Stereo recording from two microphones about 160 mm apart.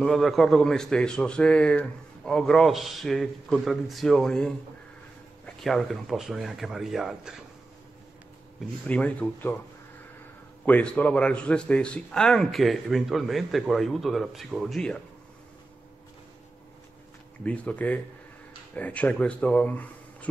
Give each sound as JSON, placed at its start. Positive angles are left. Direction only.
{"t": 0.0, "sound": "a man's voice", "side_deg": 0}
{"t": 8.5, "sound": "speech", "side_deg": 10}
{"t": 10.6, "sound": "a man's voice", "side_deg": 10}
{"t": 17.5, "sound": "speech", "side_deg": 10}